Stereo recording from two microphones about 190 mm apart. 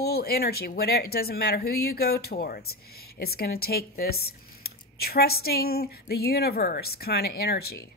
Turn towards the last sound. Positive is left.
turn(degrees=55)  # may be behind; listen again after turning